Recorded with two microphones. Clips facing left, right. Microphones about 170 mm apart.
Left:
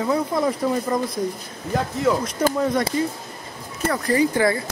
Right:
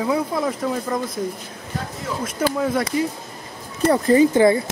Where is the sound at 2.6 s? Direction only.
5° right (ahead or behind).